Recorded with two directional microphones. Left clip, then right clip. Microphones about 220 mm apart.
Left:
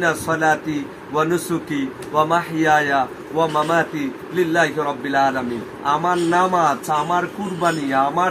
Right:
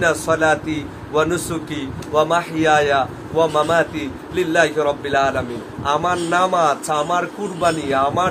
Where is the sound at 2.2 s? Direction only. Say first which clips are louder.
Right 1 dB; 20° right (ahead or behind).